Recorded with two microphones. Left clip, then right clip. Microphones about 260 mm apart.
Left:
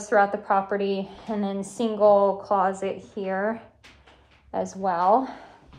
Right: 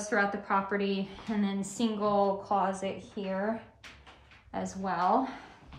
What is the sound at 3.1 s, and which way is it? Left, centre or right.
Speech, left.